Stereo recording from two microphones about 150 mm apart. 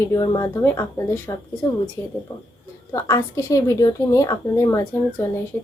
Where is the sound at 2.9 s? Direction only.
20° left (ahead or behind).